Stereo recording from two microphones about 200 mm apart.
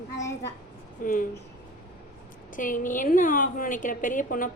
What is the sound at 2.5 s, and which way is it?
A woman's voice, 40° left (ahead or behind).